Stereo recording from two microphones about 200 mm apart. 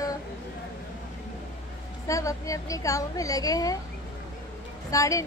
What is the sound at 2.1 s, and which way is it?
A woman's voice, 15° left (ahead or behind).